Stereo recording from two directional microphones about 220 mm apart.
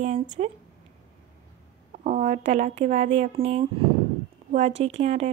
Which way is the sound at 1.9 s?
30° right (ahead or behind).